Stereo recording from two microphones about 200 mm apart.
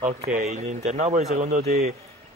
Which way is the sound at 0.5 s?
35° right (ahead or behind).